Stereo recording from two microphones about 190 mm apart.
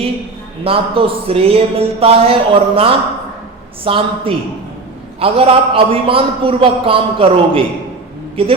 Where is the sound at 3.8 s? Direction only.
30° right (ahead or behind).